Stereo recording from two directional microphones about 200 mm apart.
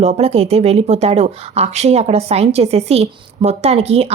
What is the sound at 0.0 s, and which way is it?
Speech, 30° right (ahead or behind).